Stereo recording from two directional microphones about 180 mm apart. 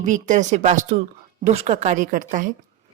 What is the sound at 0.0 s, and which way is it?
Speech, 45° right (ahead or behind).